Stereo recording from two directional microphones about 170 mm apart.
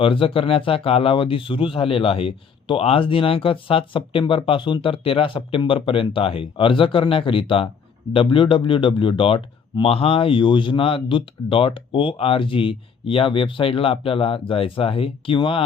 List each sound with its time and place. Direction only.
0.0 s speech: 30° left (ahead or behind)